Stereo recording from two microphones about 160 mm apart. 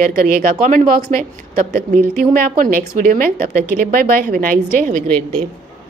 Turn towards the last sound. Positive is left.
turn(degrees=-55)  # may be behind; listen again after turning